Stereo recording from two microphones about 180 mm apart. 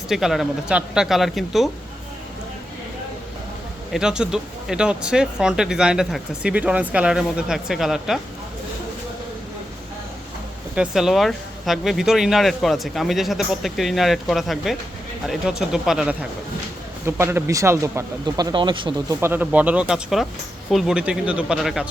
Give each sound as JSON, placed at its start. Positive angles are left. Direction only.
{"t": 0.1, "sound": "speech", "side_deg": 0}
{"t": 3.9, "sound": "speech", "side_deg": -5}
{"t": 10.8, "sound": "speech", "side_deg": 0}
{"t": 19.2, "sound": "speech", "side_deg": -10}